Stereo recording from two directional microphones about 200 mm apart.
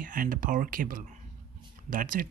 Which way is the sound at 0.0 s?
45° right (ahead or behind).